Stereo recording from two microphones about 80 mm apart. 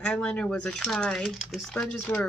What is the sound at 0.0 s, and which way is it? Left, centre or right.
Speech, centre.